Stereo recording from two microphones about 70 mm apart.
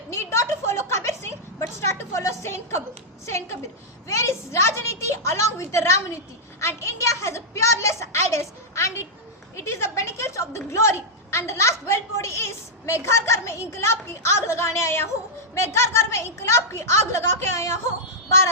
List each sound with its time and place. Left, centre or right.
0.1 s a woman's voice: left